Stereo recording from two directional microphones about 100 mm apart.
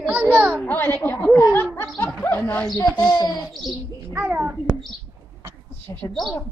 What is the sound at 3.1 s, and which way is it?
Speech, 40° left (ahead or behind).